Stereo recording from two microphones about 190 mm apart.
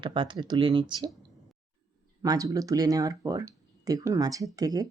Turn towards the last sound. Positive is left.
turn(degrees=-20)  # may be behind; listen again after turning